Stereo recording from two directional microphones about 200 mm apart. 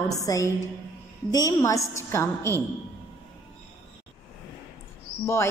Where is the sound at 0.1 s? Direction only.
15° left (ahead or behind).